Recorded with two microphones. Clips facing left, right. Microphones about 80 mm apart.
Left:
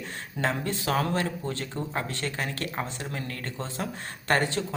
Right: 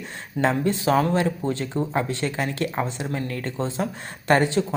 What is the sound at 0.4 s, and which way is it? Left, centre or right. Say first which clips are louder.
Speech: right 7 dB; right.